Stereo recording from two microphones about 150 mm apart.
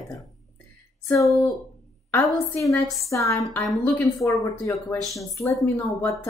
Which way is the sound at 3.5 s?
5° left (ahead or behind).